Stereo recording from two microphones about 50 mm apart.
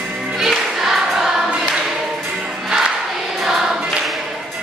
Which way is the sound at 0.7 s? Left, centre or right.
Centre.